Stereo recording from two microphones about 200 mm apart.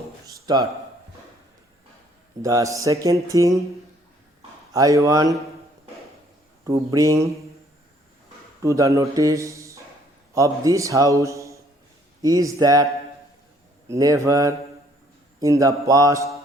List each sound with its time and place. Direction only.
0.5 s a man's voice: 20° right (ahead or behind)
2.4 s mantra: 15° right (ahead or behind)
4.7 s mantra: 15° right (ahead or behind)
6.7 s mantra: 15° right (ahead or behind)
8.6 s speech: 15° right (ahead or behind)
10.3 s mantra: 15° right (ahead or behind)